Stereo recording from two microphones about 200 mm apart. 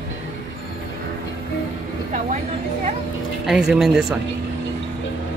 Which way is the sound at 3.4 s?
5° right (ahead or behind).